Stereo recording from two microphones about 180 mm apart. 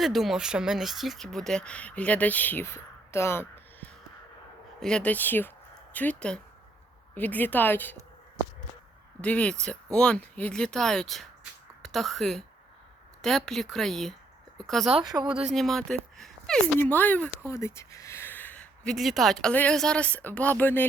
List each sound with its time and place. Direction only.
0.0 s speech: centre (ahead or behind)
9.2 s speech: 5° left (ahead or behind)
15.0 s speech: 25° right (ahead or behind)
15.5 s speech: centre (ahead or behind)